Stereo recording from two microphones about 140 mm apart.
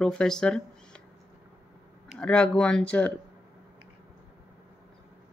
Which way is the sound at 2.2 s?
5° left (ahead or behind).